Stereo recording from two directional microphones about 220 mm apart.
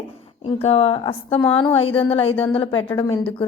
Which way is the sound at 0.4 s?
25° left (ahead or behind).